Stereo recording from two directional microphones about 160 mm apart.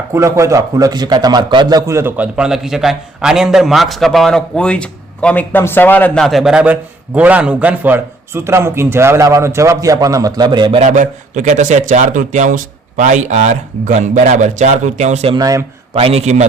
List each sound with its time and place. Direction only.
0.1 s a man's voice: 20° right (ahead or behind)
1.9 s a man's voice: 15° right (ahead or behind); by 6.2 s 10° left (ahead or behind)
6.2 s a man's voice: centre (ahead or behind); by 10.8 s 30° right (ahead or behind)
10.8 s a man's voice: 55° right (ahead or behind)
15.4 s a man's voice: 20° right (ahead or behind)
16.0 s a man's voice: 40° right (ahead or behind)